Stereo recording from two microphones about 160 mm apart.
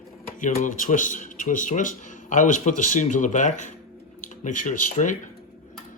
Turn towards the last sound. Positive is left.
turn(degrees=50)  # may be behind; listen again after turning